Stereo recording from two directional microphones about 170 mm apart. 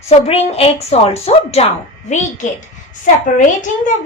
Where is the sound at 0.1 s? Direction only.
40° left (ahead or behind).